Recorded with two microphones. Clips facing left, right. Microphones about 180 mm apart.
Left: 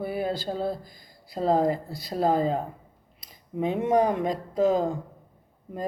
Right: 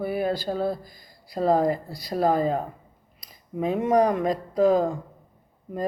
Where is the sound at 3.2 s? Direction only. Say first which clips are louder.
Even; 25° left (ahead or behind).